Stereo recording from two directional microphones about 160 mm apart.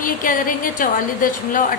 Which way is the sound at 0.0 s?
60° left (ahead or behind).